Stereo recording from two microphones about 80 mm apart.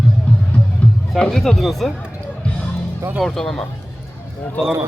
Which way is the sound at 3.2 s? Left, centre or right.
Centre.